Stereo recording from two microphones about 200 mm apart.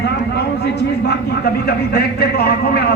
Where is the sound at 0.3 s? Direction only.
55° left (ahead or behind).